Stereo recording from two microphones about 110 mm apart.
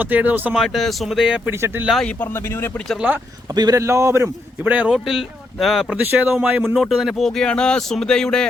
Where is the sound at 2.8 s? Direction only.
Centre (ahead or behind).